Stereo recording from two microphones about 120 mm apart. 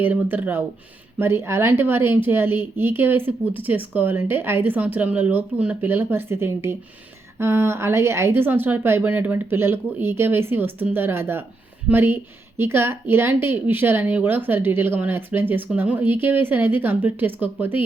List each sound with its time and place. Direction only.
0.0 s a woman's voice: 15° right (ahead or behind)